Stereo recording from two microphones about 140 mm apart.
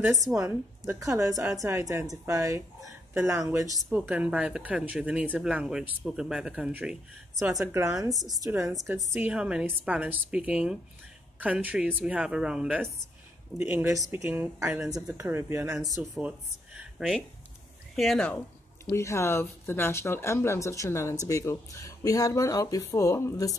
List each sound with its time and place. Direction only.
0.2 s speech: 20° right (ahead or behind)
3.9 s speech: 10° right (ahead or behind)
13.6 s speech: 20° right (ahead or behind); by 18.3 s centre (ahead or behind)
18.9 s speech: 20° left (ahead or behind)